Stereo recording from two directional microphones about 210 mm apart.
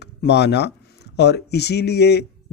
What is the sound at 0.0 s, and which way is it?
Speech, 50° left (ahead or behind).